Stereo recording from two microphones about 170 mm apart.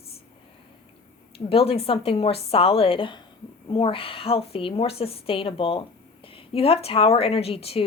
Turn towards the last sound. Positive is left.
turn(degrees=35)  # may be behind; listen again after turning